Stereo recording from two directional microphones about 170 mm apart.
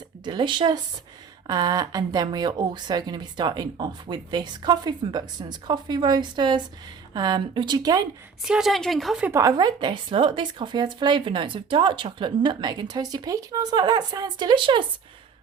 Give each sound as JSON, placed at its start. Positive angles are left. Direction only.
{"t": 0.3, "sound": "a woman's voice", "side_deg": -30}
{"t": 8.4, "sound": "speech", "side_deg": -5}
{"t": 9.4, "sound": "a woman's voice", "side_deg": -20}